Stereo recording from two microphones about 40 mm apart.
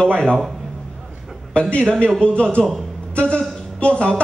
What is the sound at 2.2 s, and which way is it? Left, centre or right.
Speech, left.